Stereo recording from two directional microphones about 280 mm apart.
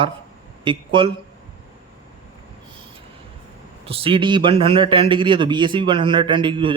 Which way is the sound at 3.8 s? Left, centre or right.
Centre.